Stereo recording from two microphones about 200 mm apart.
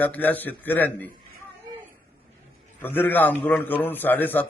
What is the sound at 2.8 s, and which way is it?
A man's voice, 10° left (ahead or behind).